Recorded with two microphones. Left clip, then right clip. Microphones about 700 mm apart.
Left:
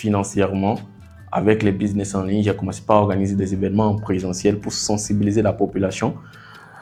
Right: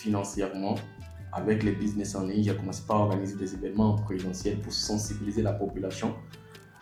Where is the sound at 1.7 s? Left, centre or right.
Left.